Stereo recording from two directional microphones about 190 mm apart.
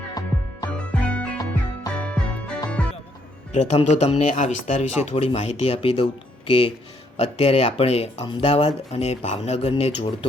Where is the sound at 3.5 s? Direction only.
35° left (ahead or behind).